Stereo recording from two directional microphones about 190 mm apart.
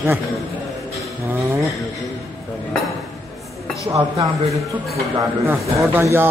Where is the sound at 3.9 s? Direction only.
15° right (ahead or behind).